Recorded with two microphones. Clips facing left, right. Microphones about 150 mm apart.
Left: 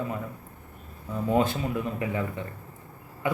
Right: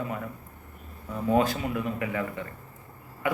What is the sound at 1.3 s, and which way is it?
Speech, 25° left (ahead or behind).